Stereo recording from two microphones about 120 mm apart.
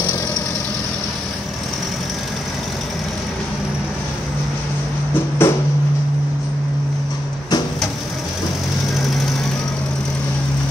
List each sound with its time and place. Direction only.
5.4 s music: 20° left (ahead or behind)